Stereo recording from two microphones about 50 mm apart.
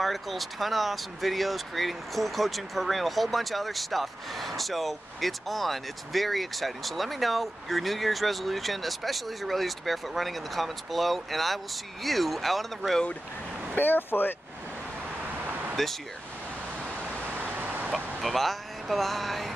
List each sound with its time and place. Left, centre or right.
0.0 s speech: centre
13.7 s speech: left
15.7 s speech: centre
17.1 s vehicle: right
17.9 s speech: centre